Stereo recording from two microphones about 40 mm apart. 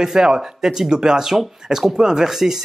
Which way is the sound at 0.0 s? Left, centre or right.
Centre.